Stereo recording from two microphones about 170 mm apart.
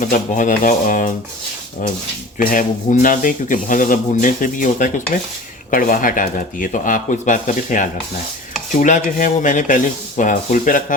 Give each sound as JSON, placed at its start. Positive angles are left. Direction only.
{"t": 0.0, "sound": "speech", "side_deg": 50}
{"t": 2.4, "sound": "speech", "side_deg": 55}